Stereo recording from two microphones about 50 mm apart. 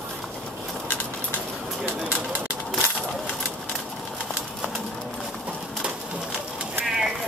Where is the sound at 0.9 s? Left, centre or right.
Left.